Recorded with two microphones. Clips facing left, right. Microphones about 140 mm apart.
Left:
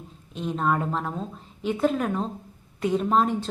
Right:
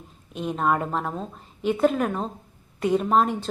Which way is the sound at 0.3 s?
5° right (ahead or behind).